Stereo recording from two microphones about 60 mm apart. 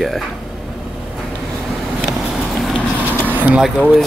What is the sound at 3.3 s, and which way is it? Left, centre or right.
Vehicle, right.